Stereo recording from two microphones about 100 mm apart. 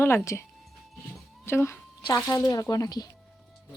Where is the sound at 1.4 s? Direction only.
25° left (ahead or behind).